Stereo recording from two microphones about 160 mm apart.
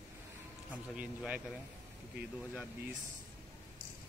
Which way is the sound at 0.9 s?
10° right (ahead or behind).